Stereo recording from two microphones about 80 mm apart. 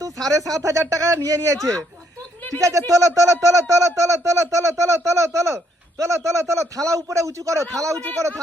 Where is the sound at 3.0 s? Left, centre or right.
Right.